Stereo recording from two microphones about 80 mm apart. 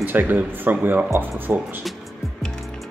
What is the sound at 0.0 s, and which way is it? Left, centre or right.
Speech, right.